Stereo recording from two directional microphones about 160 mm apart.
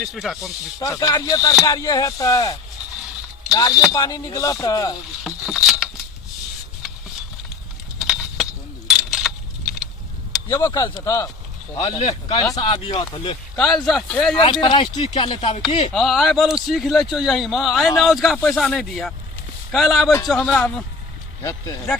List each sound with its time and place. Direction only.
0.0 s a man's voice: centre (ahead or behind)
0.8 s speech: 20° left (ahead or behind)
5.2 s vehicle: centre (ahead or behind)
7.9 s keys jangling: centre (ahead or behind)
10.5 s speech: 20° left (ahead or behind)
11.8 s speech: 35° left (ahead or behind)
13.6 s a man's voice: centre (ahead or behind)
14.3 s speech: 30° left (ahead or behind)
15.9 s a man's voice: centre (ahead or behind)